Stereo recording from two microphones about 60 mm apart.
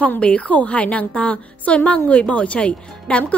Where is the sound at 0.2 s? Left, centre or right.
Left.